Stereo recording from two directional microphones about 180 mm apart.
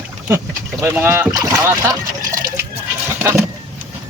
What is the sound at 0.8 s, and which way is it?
Speech, 10° right (ahead or behind).